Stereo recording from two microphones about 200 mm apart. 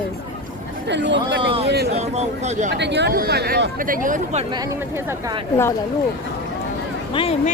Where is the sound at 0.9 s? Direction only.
60° right (ahead or behind).